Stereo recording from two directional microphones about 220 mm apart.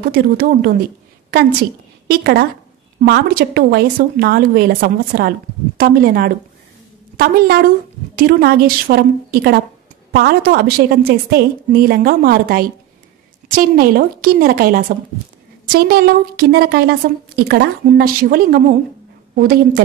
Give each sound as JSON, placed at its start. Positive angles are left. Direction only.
{"t": 0.0, "sound": "a woman's voice", "side_deg": -40}